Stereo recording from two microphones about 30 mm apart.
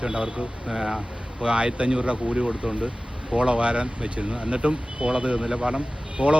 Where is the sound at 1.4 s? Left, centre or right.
Right.